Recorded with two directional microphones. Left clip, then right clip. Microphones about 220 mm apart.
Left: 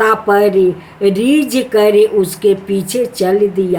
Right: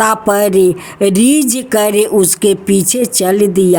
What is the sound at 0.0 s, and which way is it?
Speech, 55° right (ahead or behind).